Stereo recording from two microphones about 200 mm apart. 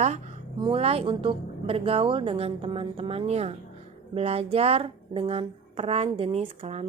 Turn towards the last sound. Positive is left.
turn(degrees=-30)  # may be behind; listen again after turning